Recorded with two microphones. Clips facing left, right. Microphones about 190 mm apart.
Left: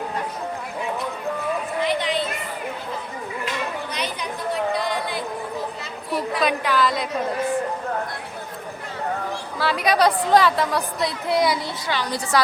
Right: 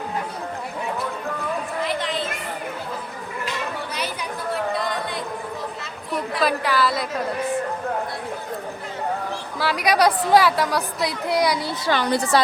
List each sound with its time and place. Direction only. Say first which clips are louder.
1.8 s a sound: left 4 dB; centre (ahead or behind)
3.9 s chatter: even; 5° right (ahead or behind)
4.7 s a sound: left 1 dB; centre (ahead or behind)
6.7 s a woman's voice: even; 10° right (ahead or behind)
9.6 s a woman's voice: even; 10° right (ahead or behind)
11.9 s a woman's voice: right 6 dB; 55° right (ahead or behind)